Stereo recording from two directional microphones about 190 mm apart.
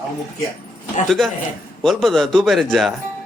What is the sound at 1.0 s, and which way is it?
A man's voice, centre (ahead or behind).